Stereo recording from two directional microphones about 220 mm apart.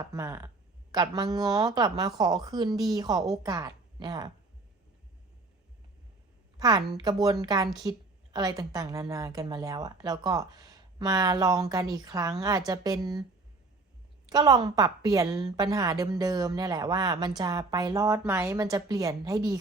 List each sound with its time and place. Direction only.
0.0 s a woman's voice: 15° right (ahead or behind)
6.6 s a woman's voice: 15° right (ahead or behind)
14.3 s a woman's voice: 15° right (ahead or behind)